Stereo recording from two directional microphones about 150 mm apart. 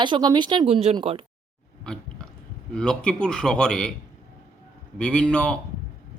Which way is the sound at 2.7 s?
5° left (ahead or behind).